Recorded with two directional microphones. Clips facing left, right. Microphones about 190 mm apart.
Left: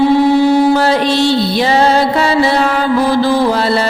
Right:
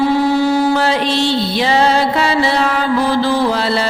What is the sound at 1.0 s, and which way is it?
Music, 10° left (ahead or behind).